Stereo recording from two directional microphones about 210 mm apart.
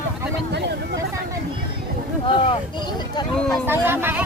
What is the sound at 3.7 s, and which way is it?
Speech, 10° right (ahead or behind).